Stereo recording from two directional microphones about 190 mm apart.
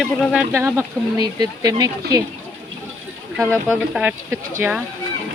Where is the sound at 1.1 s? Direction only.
20° right (ahead or behind).